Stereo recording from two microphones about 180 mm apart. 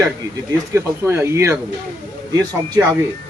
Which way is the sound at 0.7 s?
15° right (ahead or behind).